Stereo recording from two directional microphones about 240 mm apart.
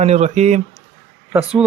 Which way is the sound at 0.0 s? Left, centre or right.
Right.